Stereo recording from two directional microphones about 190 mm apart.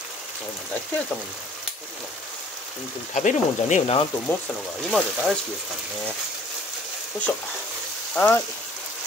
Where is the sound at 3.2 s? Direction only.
40° left (ahead or behind).